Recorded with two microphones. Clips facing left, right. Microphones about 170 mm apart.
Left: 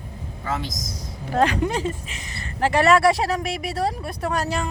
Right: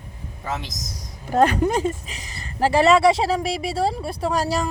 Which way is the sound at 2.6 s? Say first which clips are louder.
Right 2 dB; 30° right (ahead or behind).